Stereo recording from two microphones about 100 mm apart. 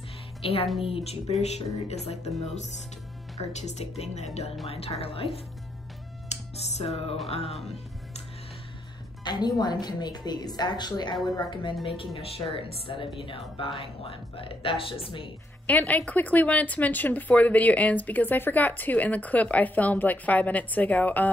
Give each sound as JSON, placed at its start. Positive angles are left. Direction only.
{"t": 0.4, "sound": "speech", "side_deg": 75}
{"t": 0.8, "sound": "music", "side_deg": 80}
{"t": 4.6, "sound": "speech", "side_deg": 80}
{"t": 6.8, "sound": "speech", "side_deg": 85}
{"t": 7.2, "sound": "music", "side_deg": 90}
{"t": 9.2, "sound": "a woman's voice", "side_deg": 45}
{"t": 15.6, "sound": "speech", "side_deg": 15}